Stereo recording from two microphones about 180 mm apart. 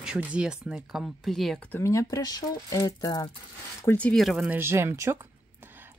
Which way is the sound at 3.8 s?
10° left (ahead or behind).